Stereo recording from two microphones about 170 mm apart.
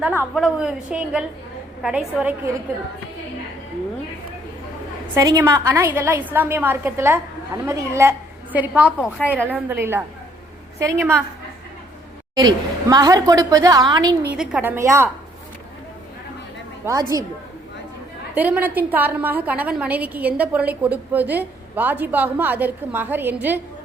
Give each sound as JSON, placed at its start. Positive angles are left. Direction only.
{"t": 0.0, "sound": "a woman's voice", "side_deg": -10}
{"t": 5.1, "sound": "a woman's voice", "side_deg": -20}
{"t": 12.3, "sound": "a woman's voice", "side_deg": -25}
{"t": 14.3, "sound": "a woman's voice", "side_deg": -10}
{"t": 16.8, "sound": "a woman's voice", "side_deg": -15}
{"t": 18.3, "sound": "a woman's voice", "side_deg": -10}